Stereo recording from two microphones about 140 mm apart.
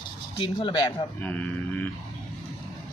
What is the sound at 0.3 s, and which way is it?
Speech, 35° left (ahead or behind).